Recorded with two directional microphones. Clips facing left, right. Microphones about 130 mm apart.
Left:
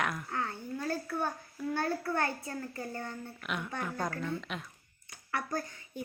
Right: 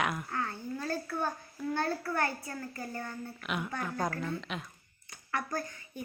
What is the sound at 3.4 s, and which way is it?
Speech, 5° right (ahead or behind).